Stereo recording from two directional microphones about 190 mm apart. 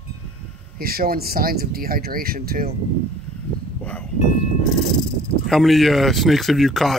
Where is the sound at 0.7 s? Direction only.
50° right (ahead or behind).